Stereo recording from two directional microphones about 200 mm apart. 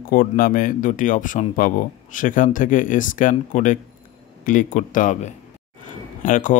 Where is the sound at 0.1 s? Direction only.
45° left (ahead or behind).